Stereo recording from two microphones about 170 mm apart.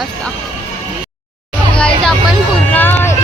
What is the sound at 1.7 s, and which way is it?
Speech, 5° left (ahead or behind).